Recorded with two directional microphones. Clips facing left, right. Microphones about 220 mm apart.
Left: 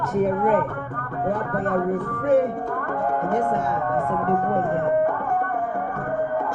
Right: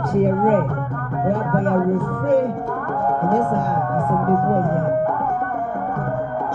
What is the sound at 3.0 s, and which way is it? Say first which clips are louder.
Speech: right 4 dB; 45° right (ahead or behind).